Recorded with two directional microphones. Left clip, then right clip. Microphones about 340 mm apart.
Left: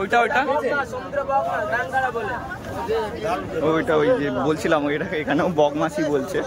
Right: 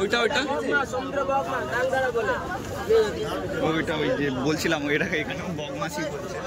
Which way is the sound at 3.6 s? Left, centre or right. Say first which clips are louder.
Left 7 dB; centre.